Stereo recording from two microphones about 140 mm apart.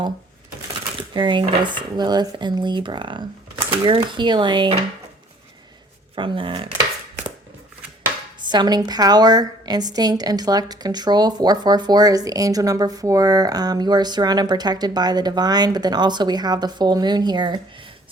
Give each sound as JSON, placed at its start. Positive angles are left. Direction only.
{"t": 1.1, "sound": "speech", "side_deg": -35}
{"t": 6.1, "sound": "speech", "side_deg": -35}
{"t": 8.4, "sound": "a woman's voice", "side_deg": -30}